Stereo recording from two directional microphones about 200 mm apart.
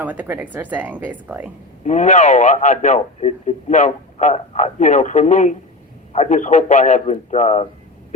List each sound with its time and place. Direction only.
0.0 s speech: 10° right (ahead or behind)
1.8 s a man's voice: 35° left (ahead or behind)